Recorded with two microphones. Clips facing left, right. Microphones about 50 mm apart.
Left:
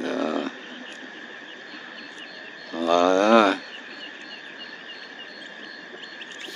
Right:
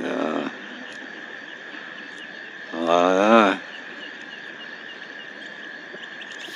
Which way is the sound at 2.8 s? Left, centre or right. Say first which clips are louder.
Right 1 dB; right.